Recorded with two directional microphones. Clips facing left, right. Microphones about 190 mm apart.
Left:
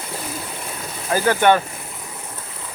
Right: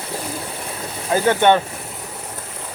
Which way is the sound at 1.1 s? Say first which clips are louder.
Right 1 dB; 20° right (ahead or behind).